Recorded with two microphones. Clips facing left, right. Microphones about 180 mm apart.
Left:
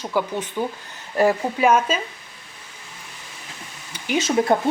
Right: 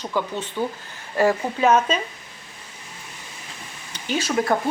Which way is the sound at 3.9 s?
15° left (ahead or behind).